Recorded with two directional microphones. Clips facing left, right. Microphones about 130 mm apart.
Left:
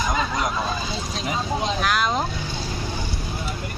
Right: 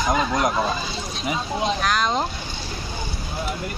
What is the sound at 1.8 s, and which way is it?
Speech, 5° left (ahead or behind).